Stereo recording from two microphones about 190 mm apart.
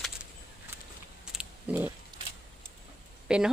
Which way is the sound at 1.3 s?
5° right (ahead or behind).